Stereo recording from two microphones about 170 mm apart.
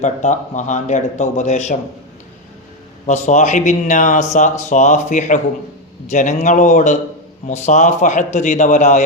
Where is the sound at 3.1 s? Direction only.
45° left (ahead or behind).